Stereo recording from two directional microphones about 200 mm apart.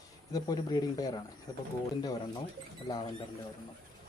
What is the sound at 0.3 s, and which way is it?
Speech, 20° left (ahead or behind).